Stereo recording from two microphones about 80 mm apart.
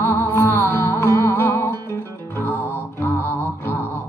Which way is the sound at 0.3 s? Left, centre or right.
Left.